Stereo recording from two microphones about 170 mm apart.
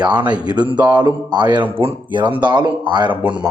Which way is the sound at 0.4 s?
25° right (ahead or behind).